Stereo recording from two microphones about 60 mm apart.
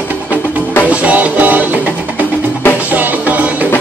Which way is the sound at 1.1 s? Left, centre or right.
Right.